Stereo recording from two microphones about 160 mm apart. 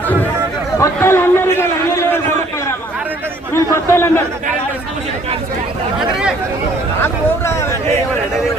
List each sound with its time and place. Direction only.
0.8 s a sound: 15° left (ahead or behind)
3.5 s speech: 15° left (ahead or behind)
7.0 s speech: 15° left (ahead or behind)